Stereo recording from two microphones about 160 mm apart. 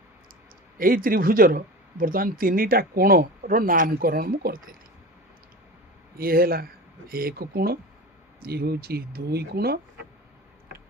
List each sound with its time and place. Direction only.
0.8 s speech: 60° right (ahead or behind)
6.1 s speech: 70° right (ahead or behind)